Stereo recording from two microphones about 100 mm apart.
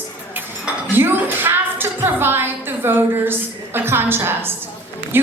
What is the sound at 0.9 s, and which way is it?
A woman's voice, 20° right (ahead or behind).